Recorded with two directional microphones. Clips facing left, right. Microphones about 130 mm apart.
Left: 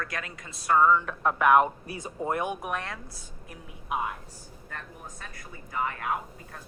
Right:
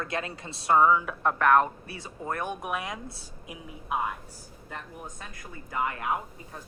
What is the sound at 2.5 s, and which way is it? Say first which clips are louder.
Speech: even; centre (ahead or behind).